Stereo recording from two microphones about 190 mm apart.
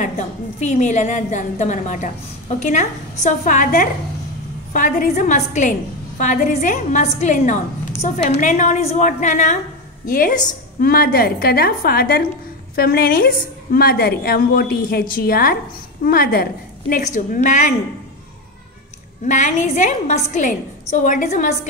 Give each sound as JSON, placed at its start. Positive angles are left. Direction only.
{"t": 0.6, "sound": "a woman's voice", "side_deg": 40}
{"t": 19.2, "sound": "a woman's voice", "side_deg": 40}